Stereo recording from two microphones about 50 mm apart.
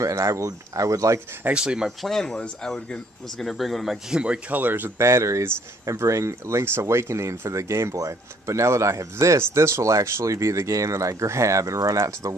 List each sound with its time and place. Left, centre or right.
0.0 s speech: right
1.5 s speech: centre
1.9 s speech: centre
4.1 s speech: right
4.5 s speech: right
4.9 s speech: right
5.9 s speech: right
9.4 s speech: right